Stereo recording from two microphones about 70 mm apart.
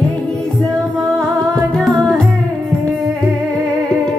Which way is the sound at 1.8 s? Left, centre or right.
Centre.